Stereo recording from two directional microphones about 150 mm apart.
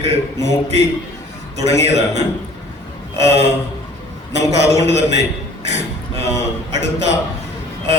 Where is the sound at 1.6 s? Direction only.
45° right (ahead or behind).